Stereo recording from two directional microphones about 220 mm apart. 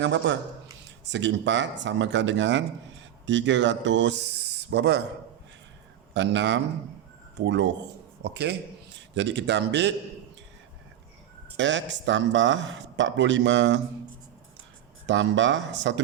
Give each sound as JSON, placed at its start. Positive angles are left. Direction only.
{"t": 0.0, "sound": "speech", "side_deg": -55}
{"t": 6.1, "sound": "a man's voice", "side_deg": -55}
{"t": 11.5, "sound": "speech", "side_deg": -55}
{"t": 15.0, "sound": "speech", "side_deg": -55}